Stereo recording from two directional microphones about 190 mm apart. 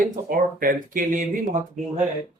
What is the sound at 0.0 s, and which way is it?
Speech, 45° right (ahead or behind).